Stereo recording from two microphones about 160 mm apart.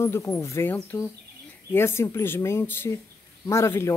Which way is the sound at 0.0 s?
15° left (ahead or behind).